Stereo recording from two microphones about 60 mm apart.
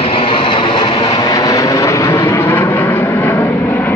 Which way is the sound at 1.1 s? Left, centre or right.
Left.